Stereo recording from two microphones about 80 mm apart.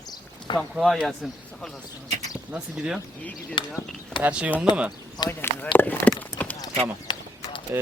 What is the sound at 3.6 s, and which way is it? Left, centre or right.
Speech, left.